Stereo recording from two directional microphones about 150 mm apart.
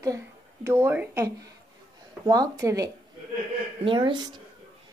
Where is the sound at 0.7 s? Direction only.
15° right (ahead or behind).